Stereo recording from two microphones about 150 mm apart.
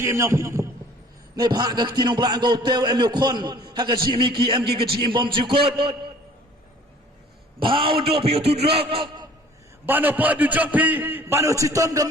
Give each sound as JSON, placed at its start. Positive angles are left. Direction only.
{"t": 0.0, "sound": "a man's voice", "side_deg": -20}
{"t": 1.4, "sound": "a man's voice", "side_deg": -30}
{"t": 7.6, "sound": "a man's voice", "side_deg": -35}
{"t": 9.8, "sound": "a man's voice", "side_deg": -10}